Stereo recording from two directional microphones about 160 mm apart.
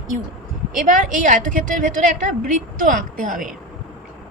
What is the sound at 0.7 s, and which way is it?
A woman's voice, 55° right (ahead or behind).